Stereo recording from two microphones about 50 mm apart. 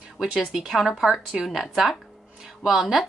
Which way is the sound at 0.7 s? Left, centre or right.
Centre.